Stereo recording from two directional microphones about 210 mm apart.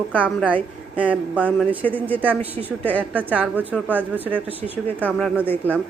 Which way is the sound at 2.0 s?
5° left (ahead or behind).